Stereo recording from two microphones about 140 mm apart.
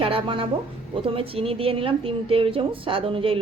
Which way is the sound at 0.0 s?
40° right (ahead or behind).